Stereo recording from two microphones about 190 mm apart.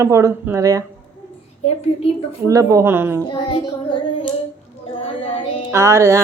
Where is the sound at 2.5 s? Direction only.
15° right (ahead or behind).